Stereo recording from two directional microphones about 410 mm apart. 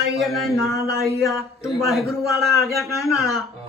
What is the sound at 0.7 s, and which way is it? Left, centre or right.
Speech, right.